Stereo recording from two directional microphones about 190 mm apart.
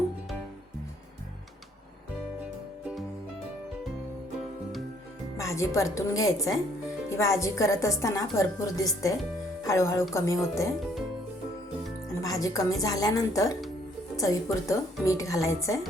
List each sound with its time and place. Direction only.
5.4 s a woman's voice: 15° left (ahead or behind)
12.2 s a woman's voice: 20° left (ahead or behind)